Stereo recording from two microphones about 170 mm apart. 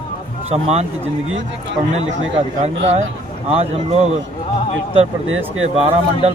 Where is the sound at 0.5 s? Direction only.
40° right (ahead or behind).